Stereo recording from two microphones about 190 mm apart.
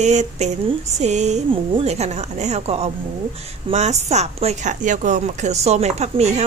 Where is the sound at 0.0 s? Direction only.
40° right (ahead or behind).